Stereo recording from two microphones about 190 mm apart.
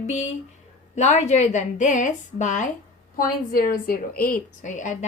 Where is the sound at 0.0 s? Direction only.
35° left (ahead or behind).